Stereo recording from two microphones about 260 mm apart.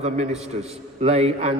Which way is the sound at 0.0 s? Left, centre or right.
Right.